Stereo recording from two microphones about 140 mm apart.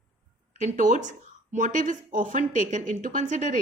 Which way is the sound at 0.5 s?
60° right (ahead or behind).